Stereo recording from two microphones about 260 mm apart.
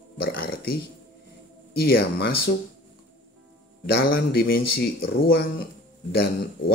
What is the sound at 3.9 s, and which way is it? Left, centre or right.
Speech, left.